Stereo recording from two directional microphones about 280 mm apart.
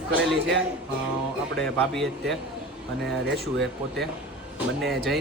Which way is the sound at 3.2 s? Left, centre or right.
Right.